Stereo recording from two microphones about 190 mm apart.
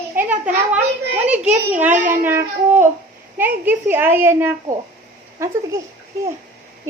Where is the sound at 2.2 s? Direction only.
10° right (ahead or behind).